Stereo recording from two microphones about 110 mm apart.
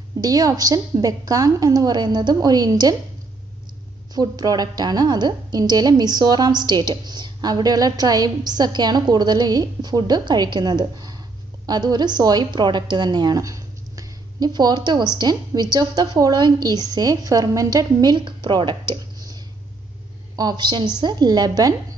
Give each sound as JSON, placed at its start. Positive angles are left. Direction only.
{"t": 0.2, "sound": "a woman's voice", "side_deg": -35}
{"t": 4.1, "sound": "a woman's voice", "side_deg": -35}
{"t": 20.3, "sound": "a woman's voice", "side_deg": -40}